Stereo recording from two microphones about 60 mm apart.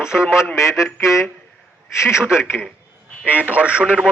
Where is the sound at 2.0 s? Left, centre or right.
Centre.